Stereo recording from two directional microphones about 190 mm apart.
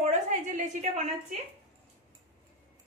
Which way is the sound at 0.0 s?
40° right (ahead or behind).